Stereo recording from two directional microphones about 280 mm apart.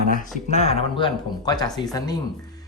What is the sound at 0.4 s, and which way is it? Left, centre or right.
Speech, left.